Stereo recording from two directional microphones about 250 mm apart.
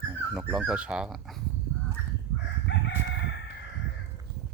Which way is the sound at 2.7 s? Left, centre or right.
Left.